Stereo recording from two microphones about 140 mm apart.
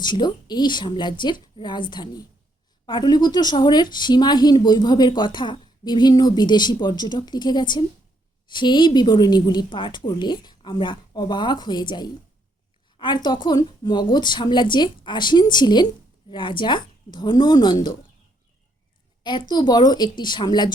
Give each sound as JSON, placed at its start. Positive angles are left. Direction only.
{"t": 0.0, "sound": "speech", "side_deg": 30}
{"t": 19.2, "sound": "speech", "side_deg": 30}